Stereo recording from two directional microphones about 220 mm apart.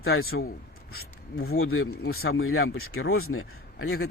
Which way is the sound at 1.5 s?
70° left (ahead or behind).